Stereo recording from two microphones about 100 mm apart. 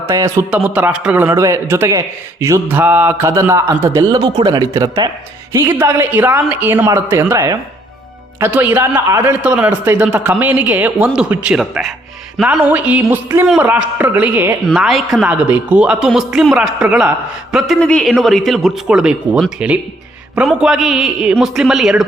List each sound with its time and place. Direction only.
0.1 s a man's voice: 30° right (ahead or behind)
0.5 s a man's voice: 15° right (ahead or behind)
1.4 s a man's voice: 30° right (ahead or behind)
2.6 s a man's voice: 15° right (ahead or behind)
3.2 s a woman's voice: 30° right (ahead or behind)
4.2 s a man's voice: 40° right (ahead or behind)
5.5 s a woman's voice: 25° right (ahead or behind)
8.4 s a man's voice: 15° right (ahead or behind)
12.4 s a man's voice: 15° right (ahead or behind)
14.7 s speech: centre (ahead or behind)
15.3 s a man's voice: 15° right (ahead or behind)
17.7 s a man's voice: 10° left (ahead or behind)